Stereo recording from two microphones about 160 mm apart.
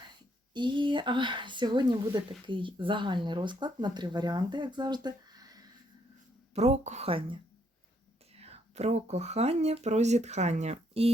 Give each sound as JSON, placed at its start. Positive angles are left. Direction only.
{"t": 0.5, "sound": "speech", "side_deg": -30}
{"t": 6.5, "sound": "speech", "side_deg": -45}